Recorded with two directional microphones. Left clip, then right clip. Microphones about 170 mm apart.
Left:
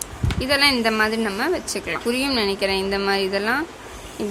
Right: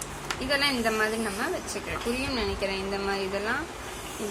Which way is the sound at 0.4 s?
70° left (ahead or behind).